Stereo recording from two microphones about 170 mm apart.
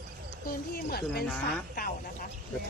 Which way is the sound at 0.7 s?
65° left (ahead or behind).